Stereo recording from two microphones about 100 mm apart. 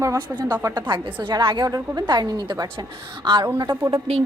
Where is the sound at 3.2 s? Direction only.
50° right (ahead or behind).